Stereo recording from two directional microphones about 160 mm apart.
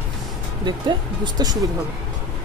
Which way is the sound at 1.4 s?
25° right (ahead or behind).